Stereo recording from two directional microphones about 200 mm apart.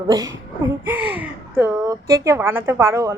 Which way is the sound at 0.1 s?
15° right (ahead or behind).